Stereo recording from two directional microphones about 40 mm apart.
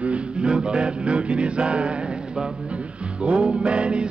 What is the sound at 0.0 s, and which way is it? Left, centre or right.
Music, right.